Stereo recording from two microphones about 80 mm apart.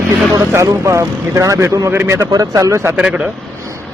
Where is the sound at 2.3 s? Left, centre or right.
Right.